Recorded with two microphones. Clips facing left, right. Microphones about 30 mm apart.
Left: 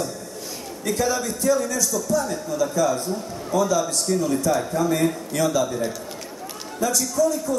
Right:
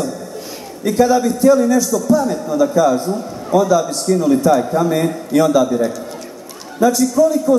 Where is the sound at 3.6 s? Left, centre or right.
Centre.